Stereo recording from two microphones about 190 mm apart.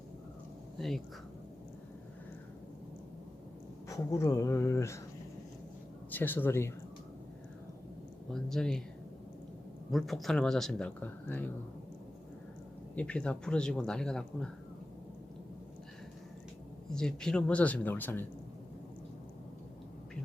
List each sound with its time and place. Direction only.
0.8 s speech: centre (ahead or behind)
3.8 s speech: 15° left (ahead or behind)
6.1 s speech: 10° left (ahead or behind)
8.3 s speech: centre (ahead or behind)
9.9 s speech: centre (ahead or behind)
13.0 s speech: 5° left (ahead or behind)
16.9 s speech: 5° left (ahead or behind)